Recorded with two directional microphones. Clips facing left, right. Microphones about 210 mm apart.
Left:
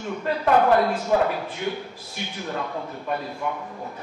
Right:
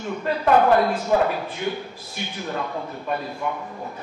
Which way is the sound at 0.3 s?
20° right (ahead or behind).